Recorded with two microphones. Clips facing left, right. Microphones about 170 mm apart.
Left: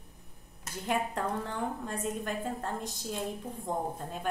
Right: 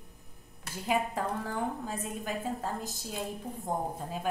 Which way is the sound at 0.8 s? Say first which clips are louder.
Right 1 dB; 5° right (ahead or behind).